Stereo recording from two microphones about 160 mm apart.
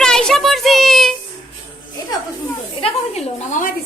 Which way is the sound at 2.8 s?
45° left (ahead or behind).